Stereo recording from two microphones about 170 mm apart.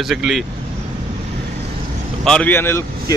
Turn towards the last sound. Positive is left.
turn(degrees=15)  # may be behind; listen again after turning